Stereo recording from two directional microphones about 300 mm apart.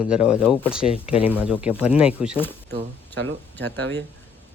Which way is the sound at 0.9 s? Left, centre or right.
Centre.